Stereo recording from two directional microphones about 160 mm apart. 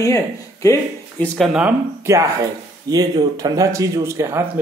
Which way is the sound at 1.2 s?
5° left (ahead or behind).